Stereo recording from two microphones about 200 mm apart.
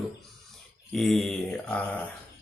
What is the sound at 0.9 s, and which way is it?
Speech, centre (ahead or behind).